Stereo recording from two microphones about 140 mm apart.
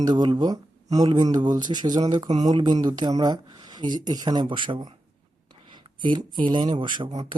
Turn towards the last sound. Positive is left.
turn(degrees=-35)  # may be behind; listen again after turning